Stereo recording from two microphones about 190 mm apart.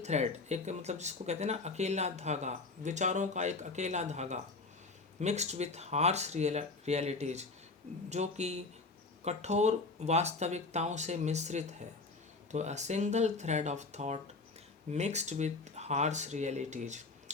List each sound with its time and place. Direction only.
0.0 s speech: 35° right (ahead or behind)